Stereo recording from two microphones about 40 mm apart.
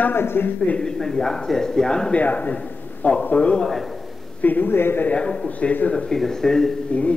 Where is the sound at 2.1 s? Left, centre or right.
Left.